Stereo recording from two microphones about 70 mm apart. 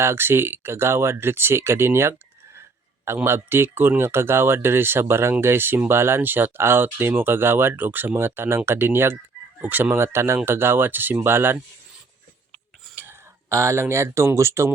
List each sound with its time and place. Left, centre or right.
0.0 s speech: right
2.6 s a sound: right
3.2 s speech: right
13.5 s speech: right